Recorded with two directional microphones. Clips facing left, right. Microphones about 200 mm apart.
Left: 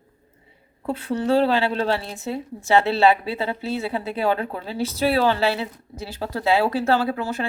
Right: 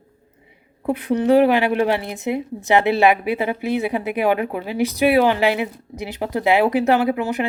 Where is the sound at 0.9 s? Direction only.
15° right (ahead or behind).